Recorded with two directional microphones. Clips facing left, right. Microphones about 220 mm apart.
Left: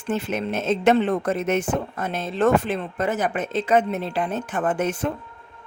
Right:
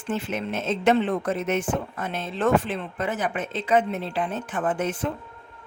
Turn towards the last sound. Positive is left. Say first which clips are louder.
# left 2 dB
turn(degrees=45)  # may be behind; listen again after turning